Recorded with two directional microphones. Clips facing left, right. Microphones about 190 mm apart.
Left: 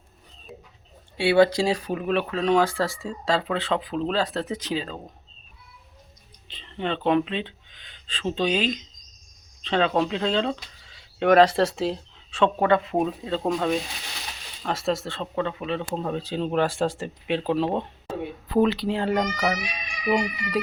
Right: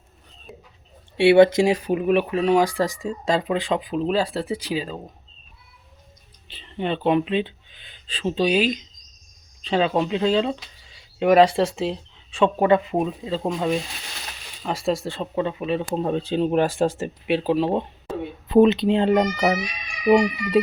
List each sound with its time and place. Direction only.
1.1 s speech: 25° right (ahead or behind)
6.5 s speech: 10° right (ahead or behind)
16.0 s speech: 25° right (ahead or behind); by 17.7 s 10° right (ahead or behind)
18.4 s speech: 20° right (ahead or behind)